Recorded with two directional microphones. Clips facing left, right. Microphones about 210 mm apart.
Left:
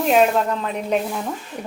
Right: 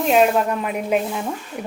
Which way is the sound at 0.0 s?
Centre (ahead or behind).